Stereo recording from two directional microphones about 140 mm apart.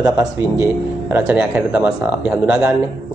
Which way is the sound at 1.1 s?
10° right (ahead or behind).